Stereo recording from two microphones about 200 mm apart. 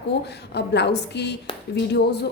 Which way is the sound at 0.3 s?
55° left (ahead or behind).